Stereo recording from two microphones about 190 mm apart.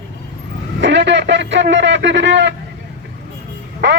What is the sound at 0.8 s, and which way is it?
A man's voice, 70° right (ahead or behind).